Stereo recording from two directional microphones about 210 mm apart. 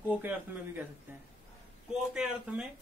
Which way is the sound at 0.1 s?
10° right (ahead or behind).